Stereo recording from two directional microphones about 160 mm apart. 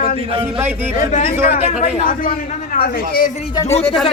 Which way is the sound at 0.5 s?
10° right (ahead or behind).